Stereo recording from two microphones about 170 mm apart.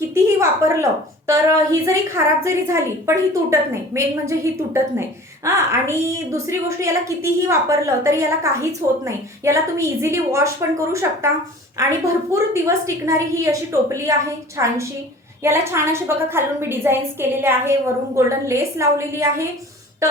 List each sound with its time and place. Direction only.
0.1 s a woman's voice: 15° right (ahead or behind)